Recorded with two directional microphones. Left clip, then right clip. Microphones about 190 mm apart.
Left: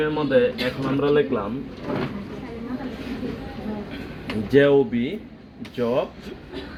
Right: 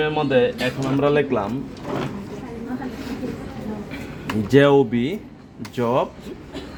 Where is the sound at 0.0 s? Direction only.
45° right (ahead or behind).